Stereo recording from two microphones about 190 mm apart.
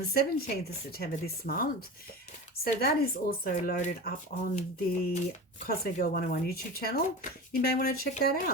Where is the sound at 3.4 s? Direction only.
45° left (ahead or behind).